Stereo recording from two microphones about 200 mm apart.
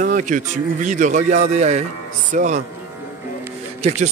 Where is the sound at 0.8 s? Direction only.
40° right (ahead or behind).